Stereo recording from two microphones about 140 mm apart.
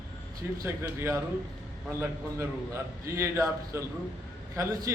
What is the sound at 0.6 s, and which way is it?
A man's voice, 20° right (ahead or behind).